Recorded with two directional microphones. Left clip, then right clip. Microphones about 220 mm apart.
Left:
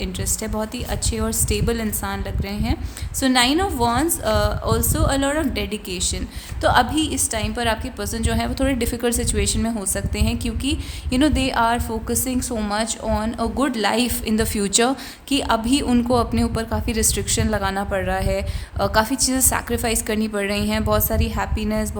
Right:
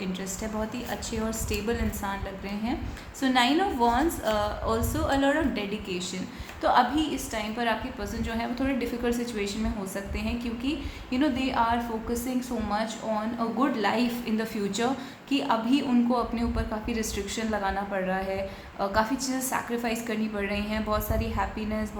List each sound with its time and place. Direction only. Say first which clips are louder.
0.0 s a woman's voice: left 6 dB; 50° left (ahead or behind)